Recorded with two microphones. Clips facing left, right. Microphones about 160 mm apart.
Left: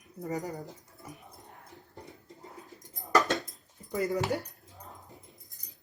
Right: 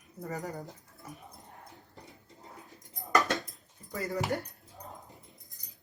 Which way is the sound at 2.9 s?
Centre (ahead or behind).